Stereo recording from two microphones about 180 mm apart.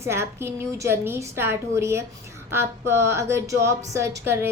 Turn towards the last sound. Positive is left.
turn(degrees=-15)  # may be behind; listen again after turning